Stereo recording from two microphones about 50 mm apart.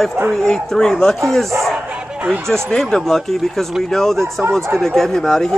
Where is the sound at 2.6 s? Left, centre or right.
Centre.